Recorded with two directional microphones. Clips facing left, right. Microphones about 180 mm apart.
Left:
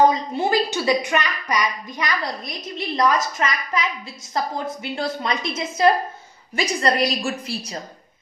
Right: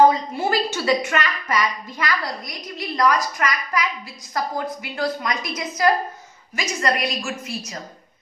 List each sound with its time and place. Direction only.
0.1 s a woman's voice: 20° left (ahead or behind)